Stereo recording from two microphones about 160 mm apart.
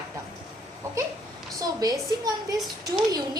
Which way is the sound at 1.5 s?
25° right (ahead or behind).